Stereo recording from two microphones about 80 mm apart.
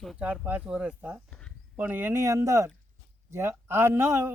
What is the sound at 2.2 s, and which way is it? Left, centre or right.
Speech, right.